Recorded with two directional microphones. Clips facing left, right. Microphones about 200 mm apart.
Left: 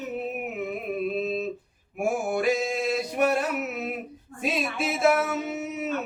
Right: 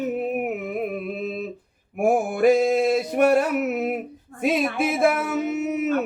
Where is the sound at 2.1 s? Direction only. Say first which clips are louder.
Right 7 dB; 55° right (ahead or behind).